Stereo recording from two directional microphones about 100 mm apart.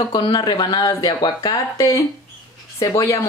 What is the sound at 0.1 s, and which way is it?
Speech, 45° left (ahead or behind).